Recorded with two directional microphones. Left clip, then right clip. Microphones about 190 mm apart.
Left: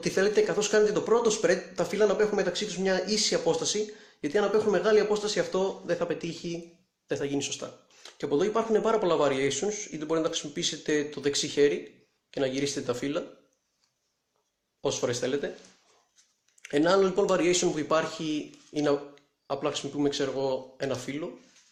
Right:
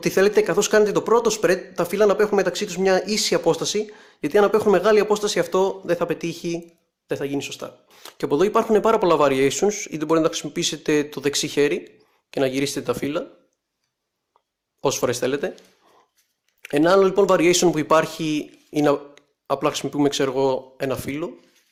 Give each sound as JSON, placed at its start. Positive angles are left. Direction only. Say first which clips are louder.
{"t": 0.0, "sound": "speech", "louder": "right 7 dB", "side_deg": -40}
{"t": 7.1, "sound": "speech", "louder": "right 4 dB", "side_deg": -30}
{"t": 14.8, "sound": "speech", "louder": "right 7 dB", "side_deg": -40}
{"t": 16.6, "sound": "speech", "louder": "right 7 dB", "side_deg": -35}